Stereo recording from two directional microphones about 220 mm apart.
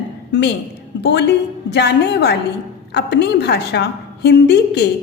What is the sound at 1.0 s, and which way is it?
A woman's voice, 50° left (ahead or behind).